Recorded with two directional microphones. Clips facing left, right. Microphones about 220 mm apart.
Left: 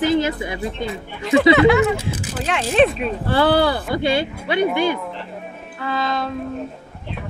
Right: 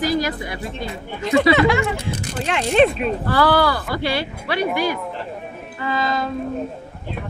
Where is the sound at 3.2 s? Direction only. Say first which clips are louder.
Left 2 dB; 25° left (ahead or behind).